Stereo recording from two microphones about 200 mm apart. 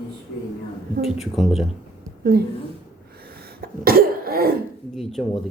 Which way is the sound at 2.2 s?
50° right (ahead or behind).